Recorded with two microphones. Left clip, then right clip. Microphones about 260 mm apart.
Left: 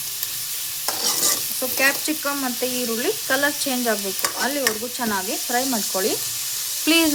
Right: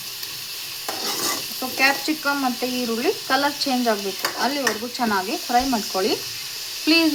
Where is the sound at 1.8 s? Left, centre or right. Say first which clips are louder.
Right 1 dB; left.